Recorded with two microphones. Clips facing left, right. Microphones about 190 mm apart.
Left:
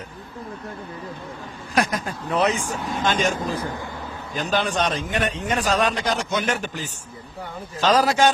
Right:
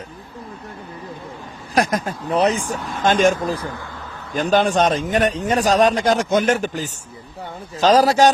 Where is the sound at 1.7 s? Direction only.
40° right (ahead or behind).